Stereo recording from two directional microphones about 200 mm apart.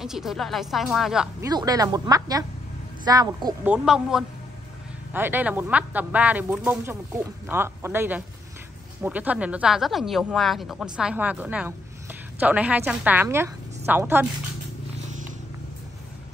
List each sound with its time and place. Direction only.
0.0 s speech: centre (ahead or behind)
1.4 s speech: 20° right (ahead or behind)
3.6 s a woman's voice: 5° right (ahead or behind)